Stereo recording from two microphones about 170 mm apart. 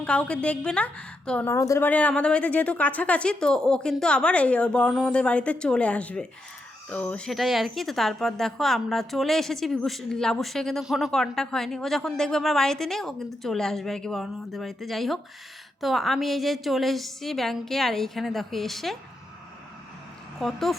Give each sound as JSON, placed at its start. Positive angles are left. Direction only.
{"t": 0.0, "sound": "a woman's voice", "side_deg": 5}
{"t": 20.4, "sound": "speech", "side_deg": 0}